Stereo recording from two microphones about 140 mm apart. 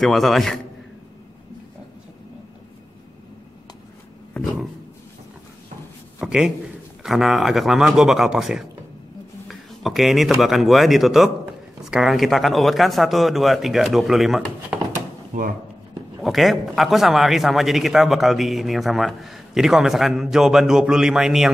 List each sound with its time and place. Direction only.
0.0 s a man's voice: centre (ahead or behind)
6.1 s a man's voice: 5° right (ahead or behind)
15.3 s speech: 75° right (ahead or behind)
16.2 s a man's voice: centre (ahead or behind)